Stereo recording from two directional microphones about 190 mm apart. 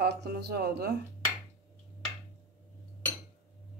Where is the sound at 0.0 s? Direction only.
60° right (ahead or behind).